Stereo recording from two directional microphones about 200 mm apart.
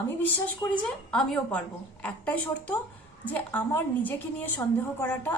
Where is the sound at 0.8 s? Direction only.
5° left (ahead or behind).